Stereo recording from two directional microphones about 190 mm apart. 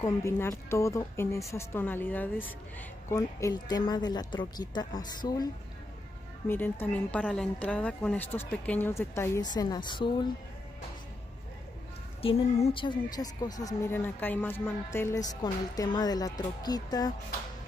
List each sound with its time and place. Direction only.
0.0 s a woman's voice: 15° left (ahead or behind)
6.4 s a woman's voice: 10° left (ahead or behind)
12.2 s speech: 30° left (ahead or behind)